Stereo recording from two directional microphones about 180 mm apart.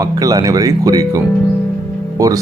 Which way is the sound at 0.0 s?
20° right (ahead or behind).